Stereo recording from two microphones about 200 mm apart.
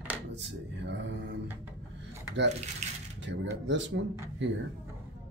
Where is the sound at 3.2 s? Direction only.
65° right (ahead or behind).